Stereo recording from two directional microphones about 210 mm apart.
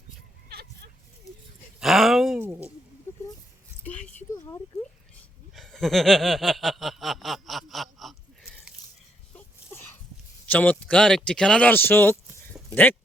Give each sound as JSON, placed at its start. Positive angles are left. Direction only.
{"t": 0.4, "sound": "a sound", "side_deg": -50}
{"t": 1.8, "sound": "speech", "side_deg": 0}
{"t": 5.5, "sound": "snicker", "side_deg": 0}
{"t": 9.3, "sound": "sneeze", "side_deg": 10}
{"t": 10.4, "sound": "speech", "side_deg": 5}